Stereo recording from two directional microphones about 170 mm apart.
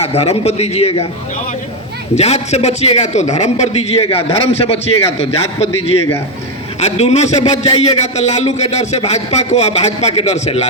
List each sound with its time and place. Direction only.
0.0 s a man's voice: 35° left (ahead or behind)
2.1 s a man's voice: 40° left (ahead or behind)